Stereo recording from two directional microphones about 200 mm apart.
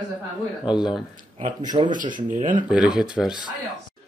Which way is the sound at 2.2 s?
40° right (ahead or behind).